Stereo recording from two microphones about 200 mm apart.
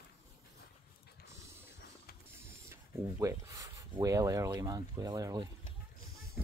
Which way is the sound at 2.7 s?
15° right (ahead or behind).